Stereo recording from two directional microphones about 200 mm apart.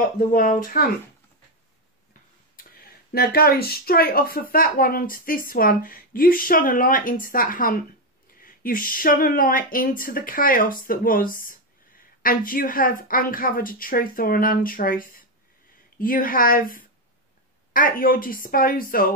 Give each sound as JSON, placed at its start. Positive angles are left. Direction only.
{"t": 0.3, "sound": "speech", "side_deg": 45}
{"t": 2.5, "sound": "speech", "side_deg": 50}